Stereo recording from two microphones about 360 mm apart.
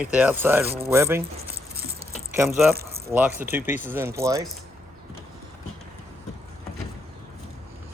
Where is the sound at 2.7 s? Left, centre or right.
Right.